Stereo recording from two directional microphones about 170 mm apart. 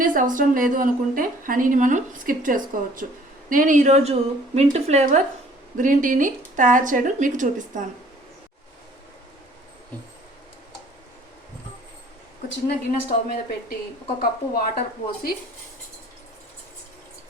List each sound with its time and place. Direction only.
0.0 s a sound: 55° right (ahead or behind)
0.3 s a woman's voice: 55° right (ahead or behind)
12.5 s speech: 70° left (ahead or behind)